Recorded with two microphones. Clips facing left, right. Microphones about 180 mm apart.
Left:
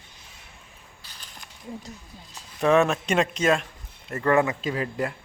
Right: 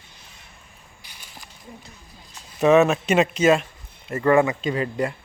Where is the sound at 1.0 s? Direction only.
10° right (ahead or behind).